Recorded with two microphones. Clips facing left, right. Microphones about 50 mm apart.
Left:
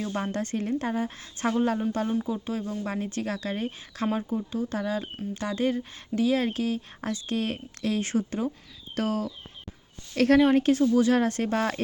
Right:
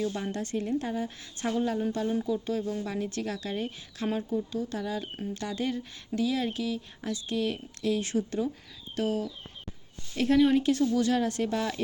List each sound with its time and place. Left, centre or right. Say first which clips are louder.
0.0 s speech: left 2 dB; left
2.2 s speech: right 1 dB; left
9.0 s speech: left 1 dB; left
10.3 s speech: left 2 dB; left
10.8 s speech: left 4 dB; left
11.1 s speech: left 3 dB; left